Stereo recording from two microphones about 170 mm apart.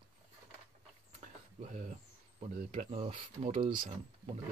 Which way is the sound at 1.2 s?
45° right (ahead or behind).